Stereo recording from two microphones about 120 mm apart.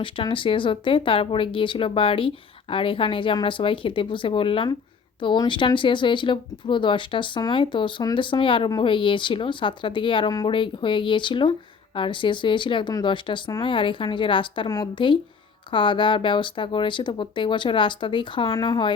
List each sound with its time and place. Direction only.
0.0 s speech: 45° left (ahead or behind)